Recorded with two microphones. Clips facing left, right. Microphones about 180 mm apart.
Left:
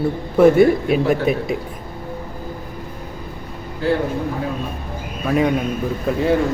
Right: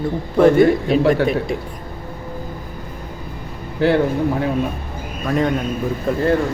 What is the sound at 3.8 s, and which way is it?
Speech, 70° right (ahead or behind).